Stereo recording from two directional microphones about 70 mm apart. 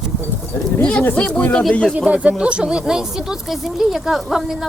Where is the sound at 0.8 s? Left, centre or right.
Centre.